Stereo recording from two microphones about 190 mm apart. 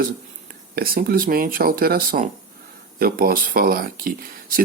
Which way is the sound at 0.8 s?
50° right (ahead or behind).